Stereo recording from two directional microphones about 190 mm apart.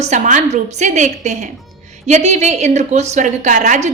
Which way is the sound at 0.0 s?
40° right (ahead or behind).